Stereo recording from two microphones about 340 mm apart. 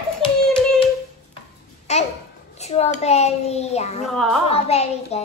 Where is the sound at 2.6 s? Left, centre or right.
Centre.